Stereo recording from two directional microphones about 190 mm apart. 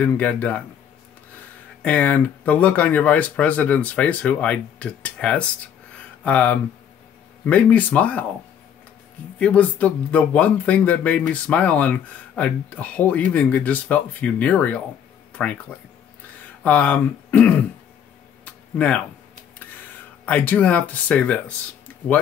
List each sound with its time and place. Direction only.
0.0 s speech: 10° left (ahead or behind)
1.8 s speech: 5° left (ahead or behind)
9.4 s speech: 5° left (ahead or behind)
16.6 s speech: 10° left (ahead or behind)
18.4 s a sound: 5° left (ahead or behind)
20.2 s speech: 10° left (ahead or behind)